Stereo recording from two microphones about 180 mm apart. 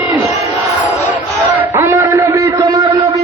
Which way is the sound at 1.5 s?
10° right (ahead or behind).